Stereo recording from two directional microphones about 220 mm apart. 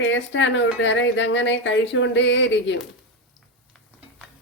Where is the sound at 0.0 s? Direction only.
55° left (ahead or behind).